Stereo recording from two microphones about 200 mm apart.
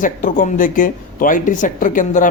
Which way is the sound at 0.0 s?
40° left (ahead or behind).